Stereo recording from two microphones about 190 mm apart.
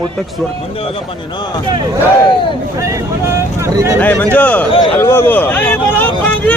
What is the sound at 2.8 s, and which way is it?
Speech, 15° right (ahead or behind).